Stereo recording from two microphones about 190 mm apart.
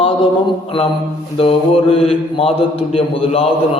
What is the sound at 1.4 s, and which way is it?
Speech, 30° left (ahead or behind).